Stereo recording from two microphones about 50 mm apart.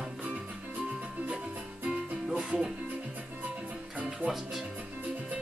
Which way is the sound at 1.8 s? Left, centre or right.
Right.